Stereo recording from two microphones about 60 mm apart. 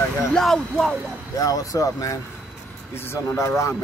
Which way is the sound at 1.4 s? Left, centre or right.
Left.